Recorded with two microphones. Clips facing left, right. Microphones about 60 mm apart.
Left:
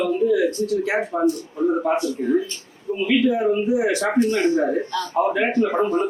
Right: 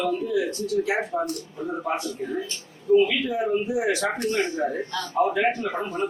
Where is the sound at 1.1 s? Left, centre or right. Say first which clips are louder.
Left 6 dB; left.